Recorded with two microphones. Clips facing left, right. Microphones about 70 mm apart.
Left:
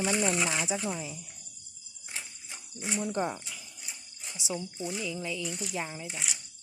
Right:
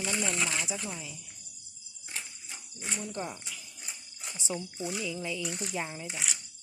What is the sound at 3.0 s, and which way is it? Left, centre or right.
Speech, left.